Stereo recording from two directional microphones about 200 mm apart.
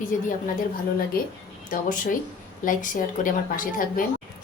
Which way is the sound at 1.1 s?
45° left (ahead or behind).